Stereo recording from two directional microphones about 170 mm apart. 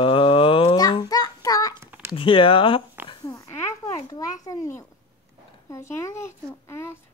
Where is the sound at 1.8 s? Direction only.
15° right (ahead or behind).